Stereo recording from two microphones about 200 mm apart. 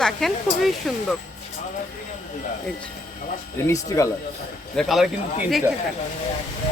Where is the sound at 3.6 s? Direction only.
15° left (ahead or behind).